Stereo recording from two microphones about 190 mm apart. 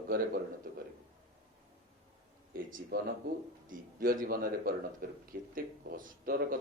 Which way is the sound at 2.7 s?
45° right (ahead or behind).